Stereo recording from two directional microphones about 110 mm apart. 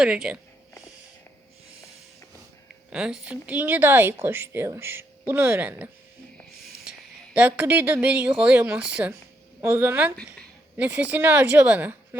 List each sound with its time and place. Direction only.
0.0 s speech: 5° right (ahead or behind)
2.9 s speech: 10° right (ahead or behind)
7.3 s speech: 15° right (ahead or behind)